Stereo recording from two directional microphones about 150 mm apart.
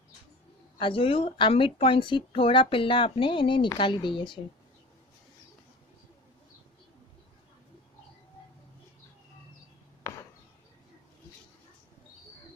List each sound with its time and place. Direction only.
0.8 s speech: 35° left (ahead or behind)